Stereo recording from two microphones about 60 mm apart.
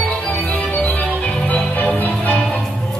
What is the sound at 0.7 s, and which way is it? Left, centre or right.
Music, left.